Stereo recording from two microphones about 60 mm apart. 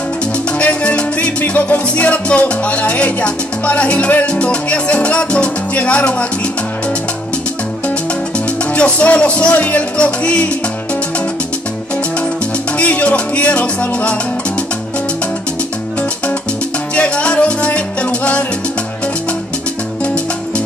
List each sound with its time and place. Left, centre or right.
0.6 s salsa music: left
8.7 s music: centre
12.7 s music: left
16.9 s salsa music: left